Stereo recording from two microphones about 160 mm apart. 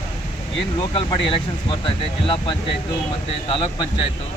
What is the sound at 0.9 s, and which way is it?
Speech, 35° left (ahead or behind).